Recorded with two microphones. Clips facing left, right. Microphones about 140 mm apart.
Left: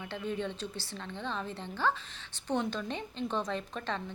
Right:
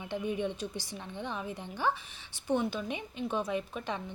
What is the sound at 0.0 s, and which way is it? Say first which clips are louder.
A woman's voice: right 2 dB; 15° right (ahead or behind).